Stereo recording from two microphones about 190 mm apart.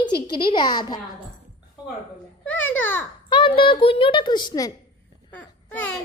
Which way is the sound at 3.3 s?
25° left (ahead or behind).